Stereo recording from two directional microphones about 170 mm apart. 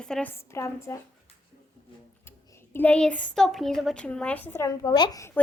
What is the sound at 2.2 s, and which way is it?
Speech, 15° left (ahead or behind).